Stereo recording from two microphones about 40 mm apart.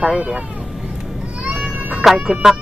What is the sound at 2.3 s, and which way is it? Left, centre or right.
Speech, centre.